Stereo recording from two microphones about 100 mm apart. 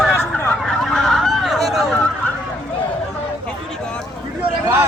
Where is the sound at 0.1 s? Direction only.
20° left (ahead or behind).